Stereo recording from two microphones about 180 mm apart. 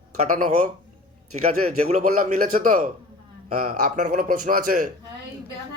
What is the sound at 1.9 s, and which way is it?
A man's voice, 50° right (ahead or behind).